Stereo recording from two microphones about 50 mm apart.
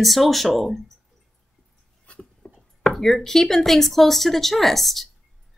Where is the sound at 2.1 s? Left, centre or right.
Left.